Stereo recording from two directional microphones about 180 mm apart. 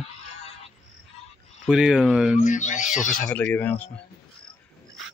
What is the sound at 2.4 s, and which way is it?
Speech, 45° left (ahead or behind).